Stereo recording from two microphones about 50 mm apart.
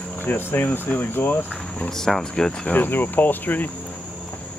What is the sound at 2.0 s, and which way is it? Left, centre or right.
Speech, centre.